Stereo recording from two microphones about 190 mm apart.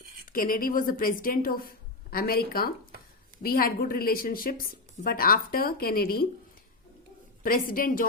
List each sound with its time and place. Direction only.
0.3 s a woman's voice: 45° left (ahead or behind)
7.4 s a woman's voice: 50° left (ahead or behind)